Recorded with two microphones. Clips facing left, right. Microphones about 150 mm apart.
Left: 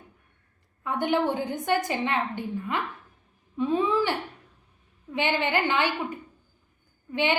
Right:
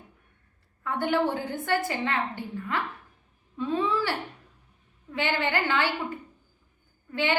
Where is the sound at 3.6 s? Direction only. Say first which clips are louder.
Left 3 dB; 20° left (ahead or behind).